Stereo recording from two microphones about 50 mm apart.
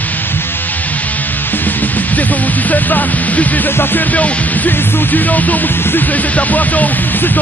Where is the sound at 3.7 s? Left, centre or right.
Left.